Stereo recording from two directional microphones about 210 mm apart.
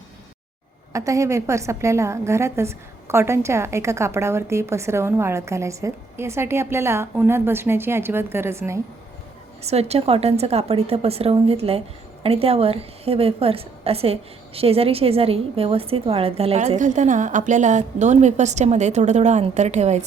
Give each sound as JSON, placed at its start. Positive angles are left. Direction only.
{"t": 0.9, "sound": "a woman's voice", "side_deg": -15}
{"t": 9.6, "sound": "a woman's voice", "side_deg": -30}